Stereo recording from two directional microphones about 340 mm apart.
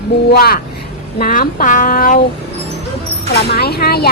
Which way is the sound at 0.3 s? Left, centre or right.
Left.